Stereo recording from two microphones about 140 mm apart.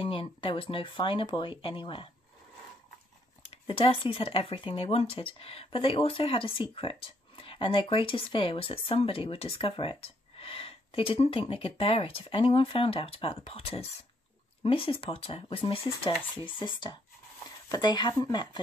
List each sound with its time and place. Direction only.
0.0 s speech: 40° left (ahead or behind)
3.6 s speech: 40° left (ahead or behind)